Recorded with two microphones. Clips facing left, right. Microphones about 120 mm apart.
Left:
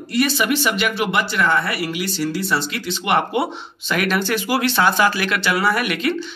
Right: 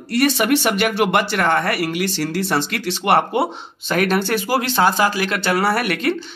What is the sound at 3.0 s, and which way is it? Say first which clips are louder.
Speech: right 2 dB; 35° right (ahead or behind).